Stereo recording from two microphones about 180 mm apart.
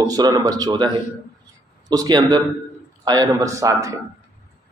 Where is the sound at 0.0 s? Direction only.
20° right (ahead or behind).